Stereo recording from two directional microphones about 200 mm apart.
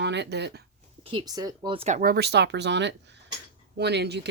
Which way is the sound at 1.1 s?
20° right (ahead or behind).